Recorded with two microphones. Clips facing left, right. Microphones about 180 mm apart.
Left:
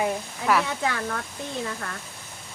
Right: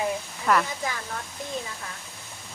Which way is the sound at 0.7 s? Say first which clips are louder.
Left 4 dB; 70° left (ahead or behind).